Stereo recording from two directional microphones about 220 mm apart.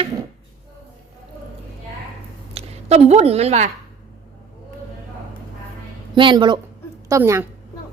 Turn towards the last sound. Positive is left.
turn(degrees=-15)  # may be behind; listen again after turning